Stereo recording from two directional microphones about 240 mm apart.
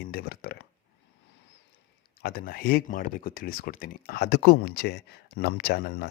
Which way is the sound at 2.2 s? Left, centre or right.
Left.